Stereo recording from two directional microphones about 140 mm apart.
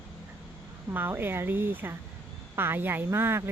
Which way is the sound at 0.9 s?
15° right (ahead or behind).